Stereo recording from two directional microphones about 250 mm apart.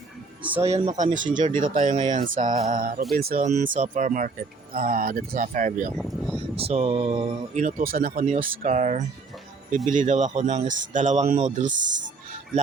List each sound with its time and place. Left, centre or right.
0.6 s speech: right
6.0 s speech: centre
6.6 s speech: right